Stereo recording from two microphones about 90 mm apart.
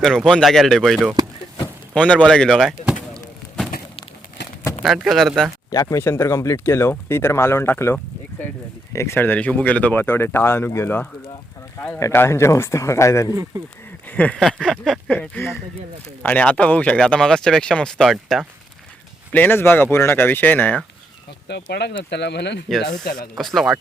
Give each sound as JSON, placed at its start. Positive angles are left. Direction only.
{"t": 0.0, "sound": "speech", "side_deg": 5}
{"t": 2.0, "sound": "speech", "side_deg": 10}
{"t": 3.2, "sound": "a sound", "side_deg": 5}
{"t": 5.0, "sound": "speech", "side_deg": 5}
{"t": 5.7, "sound": "speech", "side_deg": 40}
{"t": 6.0, "sound": "speech", "side_deg": 30}
{"t": 13.3, "sound": "speech", "side_deg": -40}
{"t": 14.1, "sound": "a sound", "side_deg": 15}
{"t": 14.3, "sound": "speech", "side_deg": 5}
{"t": 19.3, "sound": "speech", "side_deg": 20}
{"t": 22.7, "sound": "speech", "side_deg": 5}